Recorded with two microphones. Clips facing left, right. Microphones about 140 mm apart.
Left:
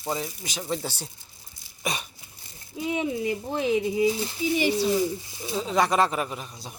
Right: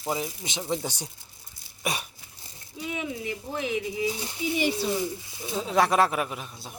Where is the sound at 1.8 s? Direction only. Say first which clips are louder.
Even; 10° right (ahead or behind).